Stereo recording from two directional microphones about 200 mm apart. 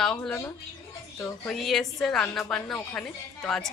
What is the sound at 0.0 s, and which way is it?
A woman's voice, 5° left (ahead or behind).